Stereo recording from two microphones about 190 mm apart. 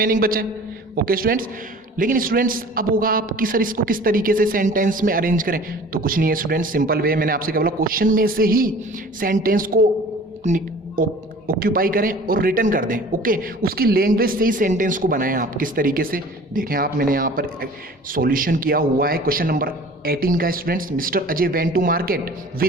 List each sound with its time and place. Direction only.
0.0 s speech: 50° right (ahead or behind)